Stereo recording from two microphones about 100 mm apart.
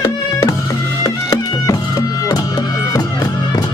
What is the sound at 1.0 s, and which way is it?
Music, 35° left (ahead or behind).